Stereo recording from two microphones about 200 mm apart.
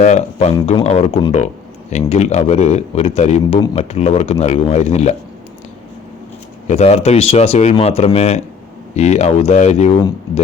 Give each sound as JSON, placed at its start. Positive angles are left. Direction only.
{"t": 0.0, "sound": "speech", "side_deg": 35}
{"t": 6.7, "sound": "speech", "side_deg": 35}